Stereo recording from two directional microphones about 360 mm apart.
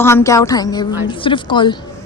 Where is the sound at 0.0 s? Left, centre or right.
Centre.